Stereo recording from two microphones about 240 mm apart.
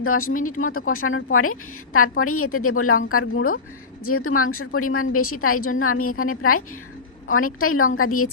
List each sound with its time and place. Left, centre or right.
0.0 s a woman's voice: left